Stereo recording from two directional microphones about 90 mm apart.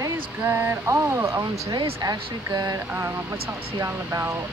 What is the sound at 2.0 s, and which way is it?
Speech, 45° right (ahead or behind).